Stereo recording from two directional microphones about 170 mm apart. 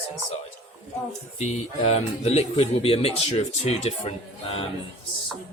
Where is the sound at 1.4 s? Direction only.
40° left (ahead or behind).